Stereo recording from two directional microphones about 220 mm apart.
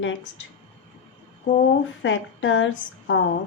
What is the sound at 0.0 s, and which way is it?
Speech, 60° left (ahead or behind).